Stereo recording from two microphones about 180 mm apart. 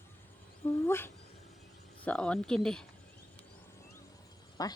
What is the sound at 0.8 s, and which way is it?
Speech, 15° left (ahead or behind).